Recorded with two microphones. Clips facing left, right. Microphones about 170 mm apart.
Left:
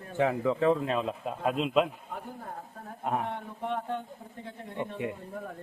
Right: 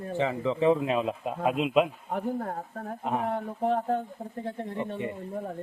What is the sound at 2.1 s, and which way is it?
Speech, 55° right (ahead or behind).